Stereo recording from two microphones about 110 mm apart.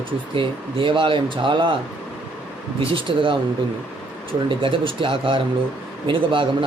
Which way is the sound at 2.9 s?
50° right (ahead or behind).